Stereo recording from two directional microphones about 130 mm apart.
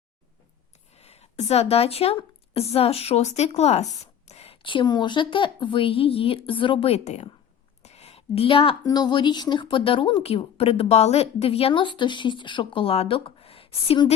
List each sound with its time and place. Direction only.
0.9 s speech: 55° left (ahead or behind)
7.8 s a sound: 55° left (ahead or behind)
8.8 s speech: 30° left (ahead or behind); by 14.0 s 45° left (ahead or behind)